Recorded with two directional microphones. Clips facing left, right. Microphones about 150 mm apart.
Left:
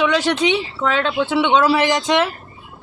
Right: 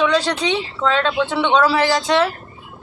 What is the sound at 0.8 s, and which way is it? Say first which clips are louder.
Speech: right 1 dB; 10° left (ahead or behind).